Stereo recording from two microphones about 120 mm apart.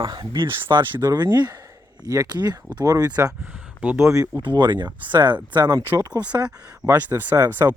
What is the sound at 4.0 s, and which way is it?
Speech, 25° right (ahead or behind).